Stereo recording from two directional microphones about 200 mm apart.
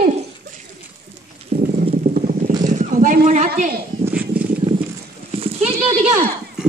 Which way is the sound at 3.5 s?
50° right (ahead or behind).